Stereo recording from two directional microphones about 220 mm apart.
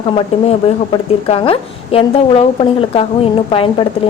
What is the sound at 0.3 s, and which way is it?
A woman's voice, 30° left (ahead or behind).